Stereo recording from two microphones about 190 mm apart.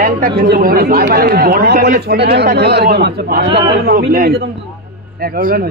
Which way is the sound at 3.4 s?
25° right (ahead or behind).